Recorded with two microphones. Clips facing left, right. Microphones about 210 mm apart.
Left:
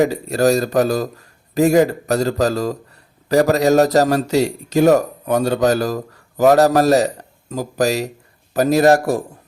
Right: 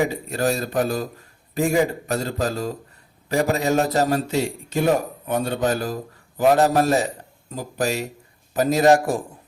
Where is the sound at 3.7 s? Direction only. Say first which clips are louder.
Left 8 dB; 40° left (ahead or behind).